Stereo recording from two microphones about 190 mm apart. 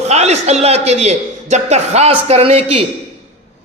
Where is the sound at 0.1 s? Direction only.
35° right (ahead or behind).